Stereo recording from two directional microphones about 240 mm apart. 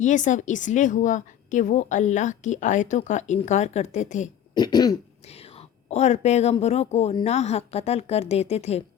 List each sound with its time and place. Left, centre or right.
0.0 s a woman's voice: left
4.5 s speech: centre